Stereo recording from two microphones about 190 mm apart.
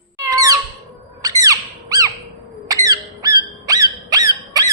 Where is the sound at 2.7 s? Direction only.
20° right (ahead or behind).